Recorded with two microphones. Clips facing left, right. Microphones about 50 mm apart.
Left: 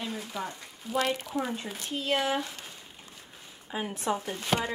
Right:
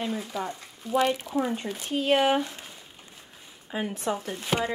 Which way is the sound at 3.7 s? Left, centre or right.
Centre.